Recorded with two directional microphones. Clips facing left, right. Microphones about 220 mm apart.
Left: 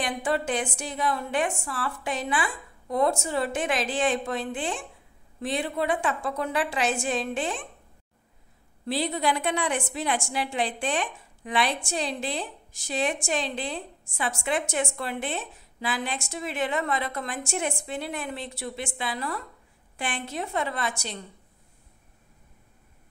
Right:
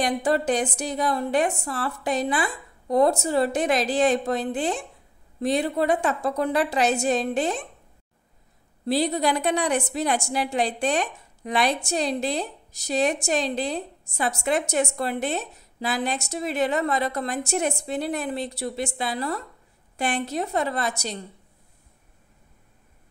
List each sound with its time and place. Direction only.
0.0 s a woman's voice: 40° right (ahead or behind)
8.8 s a woman's voice: 40° right (ahead or behind)